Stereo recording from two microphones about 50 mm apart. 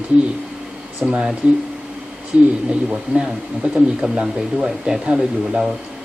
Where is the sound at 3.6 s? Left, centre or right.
Right.